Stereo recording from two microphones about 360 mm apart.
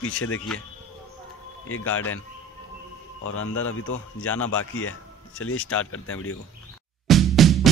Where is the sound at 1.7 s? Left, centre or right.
Left.